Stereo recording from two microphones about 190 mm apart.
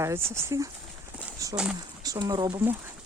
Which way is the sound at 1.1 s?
15° right (ahead or behind).